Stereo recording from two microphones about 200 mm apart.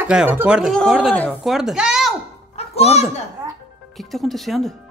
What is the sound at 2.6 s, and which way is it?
Speech, 30° left (ahead or behind).